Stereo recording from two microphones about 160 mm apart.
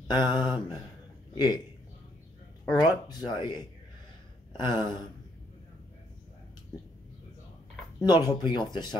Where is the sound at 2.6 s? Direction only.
20° left (ahead or behind).